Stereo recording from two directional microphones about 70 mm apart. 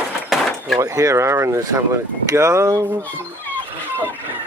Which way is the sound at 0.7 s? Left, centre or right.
Right.